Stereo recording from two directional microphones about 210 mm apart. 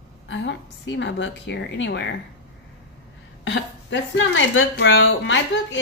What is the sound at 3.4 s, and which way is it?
A woman's voice, 60° left (ahead or behind).